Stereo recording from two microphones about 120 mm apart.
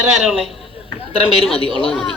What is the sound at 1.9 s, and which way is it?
Speech, centre (ahead or behind).